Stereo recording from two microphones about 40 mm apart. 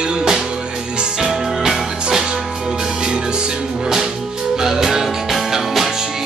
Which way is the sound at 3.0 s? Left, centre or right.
Right.